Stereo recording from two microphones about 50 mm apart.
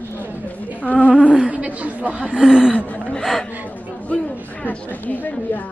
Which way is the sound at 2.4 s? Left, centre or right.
Centre.